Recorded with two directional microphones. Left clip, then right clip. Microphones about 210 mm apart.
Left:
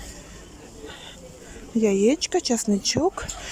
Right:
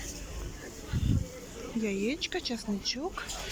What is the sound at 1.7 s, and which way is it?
Speech, 30° left (ahead or behind).